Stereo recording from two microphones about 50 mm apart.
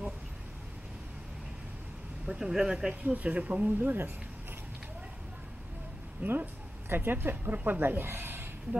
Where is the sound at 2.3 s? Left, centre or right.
Centre.